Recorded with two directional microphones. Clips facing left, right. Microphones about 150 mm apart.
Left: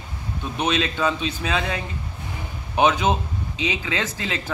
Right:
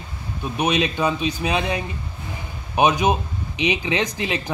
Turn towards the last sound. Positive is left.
turn(degrees=-15)  # may be behind; listen again after turning